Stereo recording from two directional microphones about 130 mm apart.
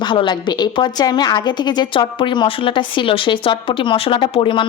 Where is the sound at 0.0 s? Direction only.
35° left (ahead or behind).